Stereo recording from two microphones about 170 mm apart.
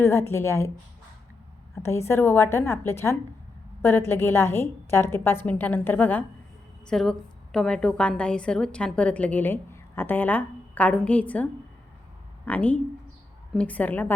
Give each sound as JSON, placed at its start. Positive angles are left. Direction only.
{"t": 0.0, "sound": "a woman's voice", "side_deg": 15}
{"t": 1.7, "sound": "a woman's voice", "side_deg": 15}
{"t": 12.5, "sound": "a woman's voice", "side_deg": 10}